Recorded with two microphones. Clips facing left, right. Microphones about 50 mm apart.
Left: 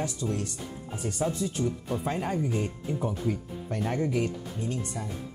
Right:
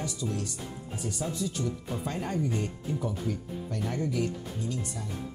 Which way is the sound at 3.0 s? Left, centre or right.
Left.